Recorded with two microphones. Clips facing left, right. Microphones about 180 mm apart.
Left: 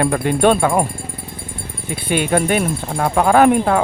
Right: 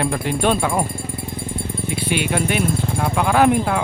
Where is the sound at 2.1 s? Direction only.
45° left (ahead or behind).